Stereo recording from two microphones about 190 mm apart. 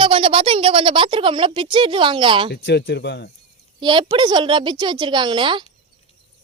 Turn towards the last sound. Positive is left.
turn(degrees=-25)  # may be behind; listen again after turning